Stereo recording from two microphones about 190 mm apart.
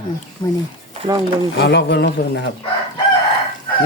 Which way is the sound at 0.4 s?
25° left (ahead or behind).